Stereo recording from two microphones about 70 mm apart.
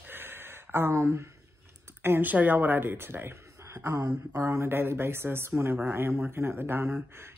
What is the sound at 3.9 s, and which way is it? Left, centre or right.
Speech, right.